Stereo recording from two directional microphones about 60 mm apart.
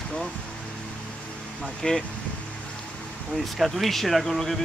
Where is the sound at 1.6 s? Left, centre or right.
Centre.